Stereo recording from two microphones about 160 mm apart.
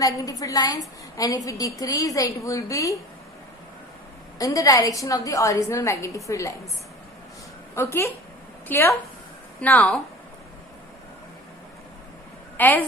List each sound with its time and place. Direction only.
0.0 s a woman's voice: 20° left (ahead or behind)
4.4 s a woman's voice: 20° left (ahead or behind)
7.8 s a woman's voice: 15° left (ahead or behind)
12.5 s speech: 10° left (ahead or behind)